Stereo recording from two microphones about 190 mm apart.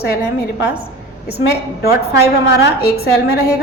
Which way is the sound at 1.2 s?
55° left (ahead or behind).